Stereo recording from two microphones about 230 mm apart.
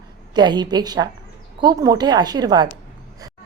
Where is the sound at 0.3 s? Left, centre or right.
Centre.